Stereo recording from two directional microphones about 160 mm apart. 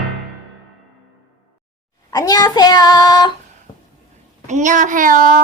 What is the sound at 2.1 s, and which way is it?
Child singing, 25° left (ahead or behind).